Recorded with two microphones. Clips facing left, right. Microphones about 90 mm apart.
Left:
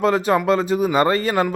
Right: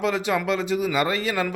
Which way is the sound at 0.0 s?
45° left (ahead or behind).